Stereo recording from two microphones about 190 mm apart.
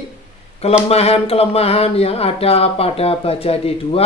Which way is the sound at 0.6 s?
30° left (ahead or behind).